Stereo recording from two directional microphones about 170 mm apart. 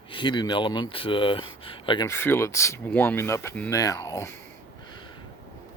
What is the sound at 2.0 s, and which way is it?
Speech, 15° left (ahead or behind).